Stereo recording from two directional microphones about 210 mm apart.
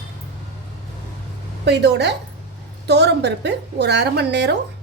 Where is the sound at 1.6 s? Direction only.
55° right (ahead or behind).